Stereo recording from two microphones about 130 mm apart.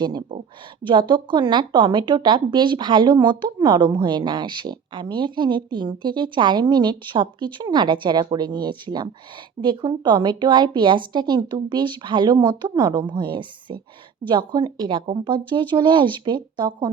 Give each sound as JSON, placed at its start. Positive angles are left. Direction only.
{"t": 0.0, "sound": "speech", "side_deg": -30}